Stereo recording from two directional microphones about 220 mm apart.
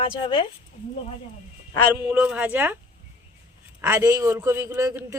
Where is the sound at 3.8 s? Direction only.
10° right (ahead or behind).